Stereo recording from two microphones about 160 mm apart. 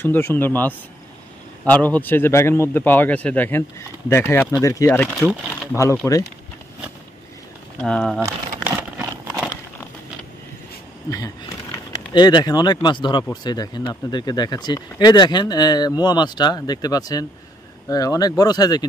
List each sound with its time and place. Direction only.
0.0 s a man's voice: 15° left (ahead or behind)
7.8 s speech: 5° left (ahead or behind)
8.3 s crumpling: 10° right (ahead or behind)
11.1 s speech: 20° left (ahead or behind)